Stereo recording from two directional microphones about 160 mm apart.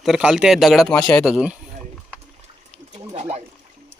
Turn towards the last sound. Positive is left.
turn(degrees=-45)  # may be behind; listen again after turning